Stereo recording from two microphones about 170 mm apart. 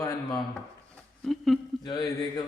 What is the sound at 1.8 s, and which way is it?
Speech, 25° left (ahead or behind).